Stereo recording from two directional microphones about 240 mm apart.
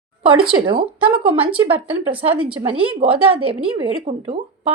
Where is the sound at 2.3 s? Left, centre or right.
Right.